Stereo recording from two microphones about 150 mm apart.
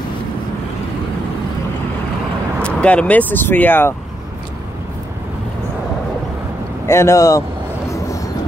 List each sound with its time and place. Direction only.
2.6 s speech: 10° left (ahead or behind)
6.9 s speech: 20° left (ahead or behind)